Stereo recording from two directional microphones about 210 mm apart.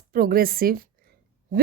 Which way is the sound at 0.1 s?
45° right (ahead or behind).